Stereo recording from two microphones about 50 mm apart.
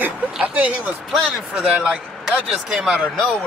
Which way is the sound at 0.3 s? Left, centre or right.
Right.